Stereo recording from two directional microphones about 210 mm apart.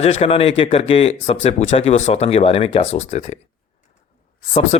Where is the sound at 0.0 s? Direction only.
30° left (ahead or behind).